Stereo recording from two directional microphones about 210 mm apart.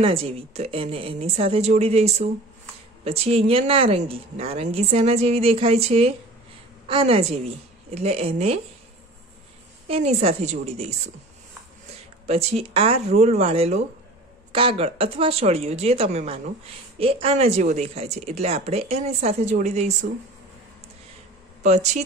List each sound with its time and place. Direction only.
0.0 s speech: 25° right (ahead or behind)
9.8 s speech: 30° right (ahead or behind)
12.3 s speech: 30° right (ahead or behind)
21.6 s speech: 35° right (ahead or behind)